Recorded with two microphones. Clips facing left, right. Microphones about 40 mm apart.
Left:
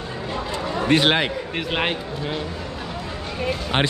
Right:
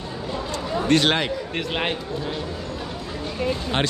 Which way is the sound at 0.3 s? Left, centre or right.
Left.